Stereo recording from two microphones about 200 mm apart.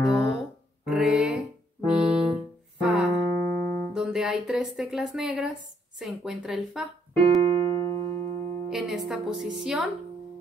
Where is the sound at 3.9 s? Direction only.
5° right (ahead or behind).